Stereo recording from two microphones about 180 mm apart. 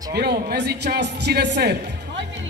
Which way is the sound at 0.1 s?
60° right (ahead or behind).